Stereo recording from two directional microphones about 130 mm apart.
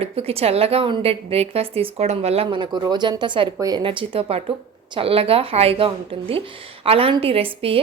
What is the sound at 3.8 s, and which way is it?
A woman's voice, 40° right (ahead or behind).